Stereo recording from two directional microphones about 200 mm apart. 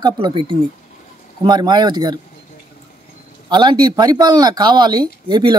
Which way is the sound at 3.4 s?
20° right (ahead or behind).